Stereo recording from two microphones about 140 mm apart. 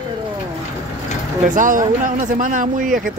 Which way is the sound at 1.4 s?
70° right (ahead or behind).